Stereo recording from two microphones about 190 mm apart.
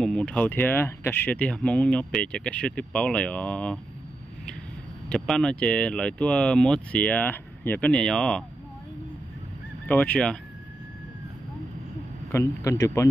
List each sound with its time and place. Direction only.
0.0 s speech: 5° left (ahead or behind)
5.1 s speech: centre (ahead or behind)
9.8 s speech: 10° left (ahead or behind)
12.3 s speech: 15° left (ahead or behind)